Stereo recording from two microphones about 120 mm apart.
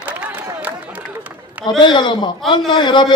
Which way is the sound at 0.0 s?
15° right (ahead or behind).